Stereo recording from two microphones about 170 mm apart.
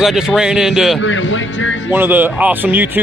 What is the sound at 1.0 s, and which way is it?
Speech, 90° left.